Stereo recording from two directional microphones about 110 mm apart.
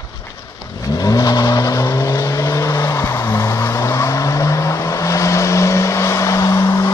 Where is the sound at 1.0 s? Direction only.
35° left (ahead or behind).